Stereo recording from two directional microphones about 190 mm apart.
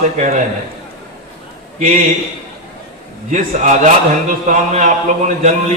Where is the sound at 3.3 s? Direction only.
40° right (ahead or behind).